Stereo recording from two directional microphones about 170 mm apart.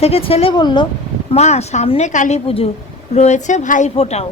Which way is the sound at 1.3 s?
40° left (ahead or behind).